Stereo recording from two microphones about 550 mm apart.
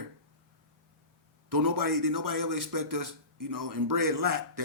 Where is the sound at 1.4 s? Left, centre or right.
Right.